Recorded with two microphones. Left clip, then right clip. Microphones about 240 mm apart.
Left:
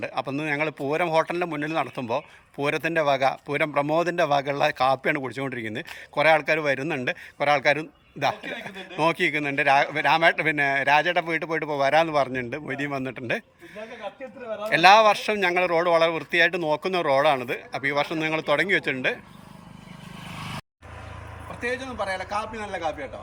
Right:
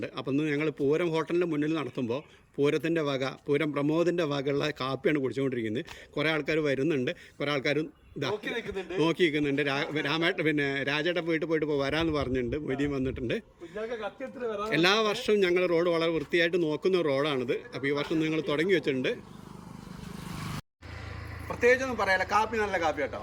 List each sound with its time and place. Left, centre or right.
0.0 s speech: centre
14.7 s speech: centre
21.6 s a man's voice: centre